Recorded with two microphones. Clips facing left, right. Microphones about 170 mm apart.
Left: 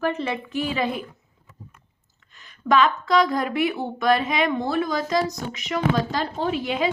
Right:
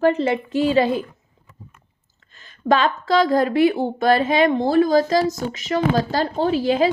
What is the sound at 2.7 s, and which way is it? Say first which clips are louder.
A woman's voice: right 1 dB; 30° right (ahead or behind).